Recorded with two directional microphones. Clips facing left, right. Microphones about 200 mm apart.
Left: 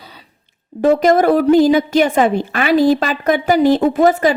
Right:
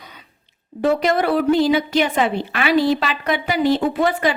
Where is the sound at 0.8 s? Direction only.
45° left (ahead or behind).